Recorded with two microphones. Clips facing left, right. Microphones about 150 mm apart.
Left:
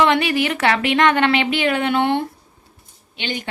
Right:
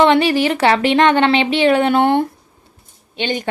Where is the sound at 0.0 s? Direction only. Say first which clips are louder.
Right 4 dB; 30° right (ahead or behind).